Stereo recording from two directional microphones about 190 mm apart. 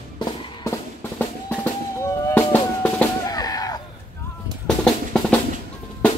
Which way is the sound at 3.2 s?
20° left (ahead or behind).